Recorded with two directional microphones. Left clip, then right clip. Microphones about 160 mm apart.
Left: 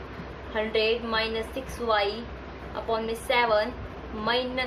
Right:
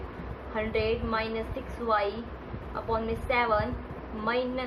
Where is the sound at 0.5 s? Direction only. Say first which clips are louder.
Left 4 dB; 30° left (ahead or behind).